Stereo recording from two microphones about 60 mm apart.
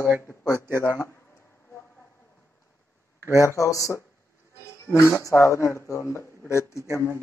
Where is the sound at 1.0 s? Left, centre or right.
Left.